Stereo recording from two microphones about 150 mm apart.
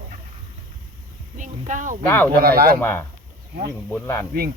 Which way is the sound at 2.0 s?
15° left (ahead or behind).